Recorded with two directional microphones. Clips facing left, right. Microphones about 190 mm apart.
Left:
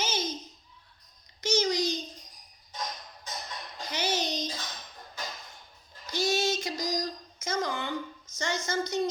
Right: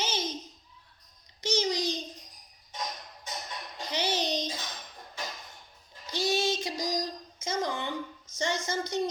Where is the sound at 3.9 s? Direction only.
35° right (ahead or behind).